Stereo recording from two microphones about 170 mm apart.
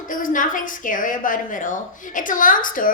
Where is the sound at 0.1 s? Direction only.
55° left (ahead or behind).